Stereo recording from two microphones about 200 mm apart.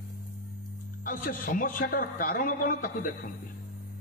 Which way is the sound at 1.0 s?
45° left (ahead or behind).